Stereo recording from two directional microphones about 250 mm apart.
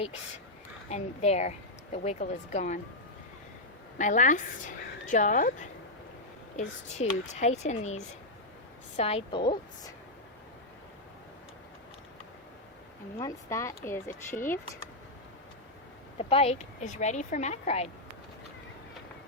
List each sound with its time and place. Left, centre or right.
0.9 s a woman's voice: left
3.9 s a woman's voice: left
9.0 s a woman's voice: left
13.1 s speech: centre
16.1 s a woman's voice: left